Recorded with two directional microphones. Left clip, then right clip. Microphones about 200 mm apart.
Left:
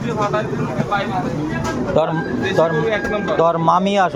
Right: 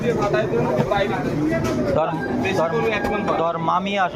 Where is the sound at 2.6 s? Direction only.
55° left (ahead or behind).